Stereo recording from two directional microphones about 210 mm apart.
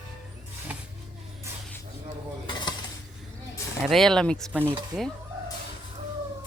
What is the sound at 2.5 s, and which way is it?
Dishes, 20° left (ahead or behind).